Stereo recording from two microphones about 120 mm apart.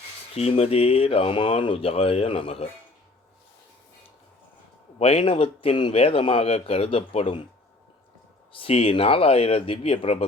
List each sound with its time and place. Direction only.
0.3 s a man's voice: 60° left (ahead or behind)
4.9 s a man's voice: 50° left (ahead or behind)
8.5 s a man's voice: 50° left (ahead or behind)